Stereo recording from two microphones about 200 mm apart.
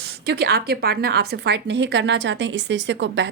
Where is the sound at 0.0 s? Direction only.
55° right (ahead or behind).